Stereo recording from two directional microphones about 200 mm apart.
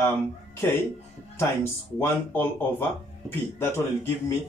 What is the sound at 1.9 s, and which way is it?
Speech, 10° left (ahead or behind).